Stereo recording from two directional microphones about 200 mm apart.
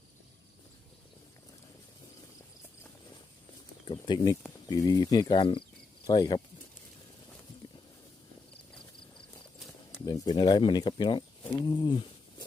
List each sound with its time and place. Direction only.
3.8 s speech: 25° left (ahead or behind)
9.9 s speech: 20° left (ahead or behind)